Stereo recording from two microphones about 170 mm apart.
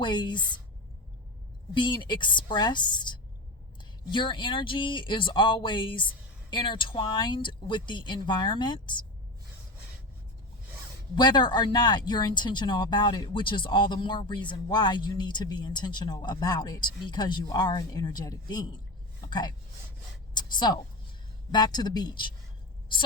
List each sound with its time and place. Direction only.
0.0 s speech: 25° left (ahead or behind)
1.7 s speech: 30° left (ahead or behind)
11.1 s speech: 25° left (ahead or behind)
20.3 s a sound: 25° left (ahead or behind)
21.5 s speech: 25° left (ahead or behind)